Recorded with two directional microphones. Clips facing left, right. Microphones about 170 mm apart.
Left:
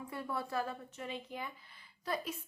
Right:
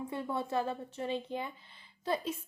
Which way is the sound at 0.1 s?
25° right (ahead or behind).